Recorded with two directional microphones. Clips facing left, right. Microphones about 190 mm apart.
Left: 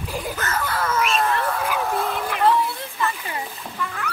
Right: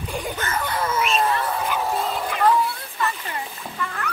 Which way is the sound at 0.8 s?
10° right (ahead or behind).